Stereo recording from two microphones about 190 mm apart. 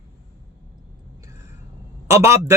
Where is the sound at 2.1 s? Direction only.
15° right (ahead or behind).